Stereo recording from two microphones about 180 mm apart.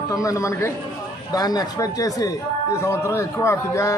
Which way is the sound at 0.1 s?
15° left (ahead or behind).